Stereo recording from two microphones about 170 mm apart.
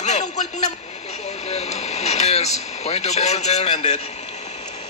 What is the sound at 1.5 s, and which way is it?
A man's voice, 40° left (ahead or behind).